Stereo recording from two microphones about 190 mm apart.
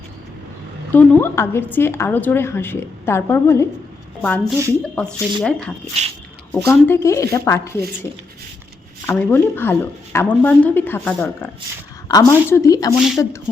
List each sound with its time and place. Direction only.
0.9 s a woman's voice: 10° left (ahead or behind)
6.0 s speech: 35° right (ahead or behind)
6.7 s a woman's voice: 15° left (ahead or behind)
9.0 s a woman's voice: 10° left (ahead or behind)